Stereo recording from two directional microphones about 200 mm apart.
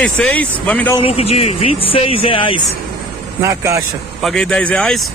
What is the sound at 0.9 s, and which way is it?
Speech, 30° left (ahead or behind).